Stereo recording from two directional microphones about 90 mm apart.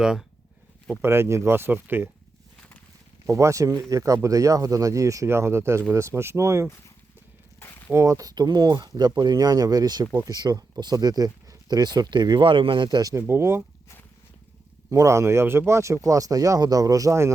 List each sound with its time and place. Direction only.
0.0 s speech: 10° right (ahead or behind)
1.0 s speech: 30° right (ahead or behind)
3.2 s speech: 35° right (ahead or behind)
7.9 s speech: 35° right (ahead or behind); by 13.0 s 70° right (ahead or behind)
13.0 s speech: 40° right (ahead or behind)
13.2 s speech: 25° right (ahead or behind)
14.8 s speech: 35° right (ahead or behind)